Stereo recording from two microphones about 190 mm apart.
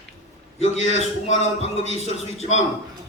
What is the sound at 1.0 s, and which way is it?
A man's voice, 35° left (ahead or behind).